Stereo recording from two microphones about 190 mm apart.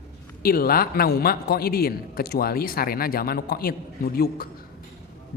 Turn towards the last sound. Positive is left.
turn(degrees=50)  # may be behind; listen again after turning